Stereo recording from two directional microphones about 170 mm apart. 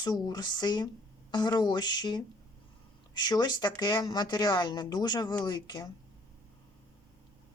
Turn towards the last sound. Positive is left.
turn(degrees=25)  # may be behind; listen again after turning